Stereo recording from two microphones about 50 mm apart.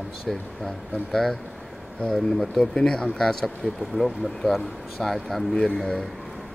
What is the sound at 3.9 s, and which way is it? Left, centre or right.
Speech, centre.